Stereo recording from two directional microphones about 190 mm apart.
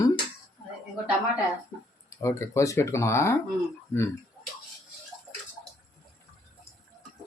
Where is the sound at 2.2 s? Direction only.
15° left (ahead or behind).